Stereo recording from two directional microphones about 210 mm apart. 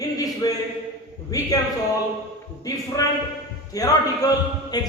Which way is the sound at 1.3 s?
15° left (ahead or behind).